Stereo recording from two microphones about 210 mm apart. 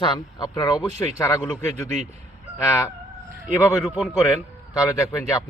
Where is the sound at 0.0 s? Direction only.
20° left (ahead or behind).